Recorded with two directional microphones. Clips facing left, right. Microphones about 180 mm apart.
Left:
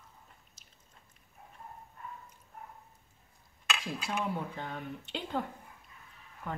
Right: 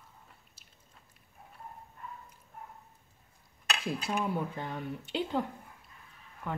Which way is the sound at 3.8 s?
5° right (ahead or behind).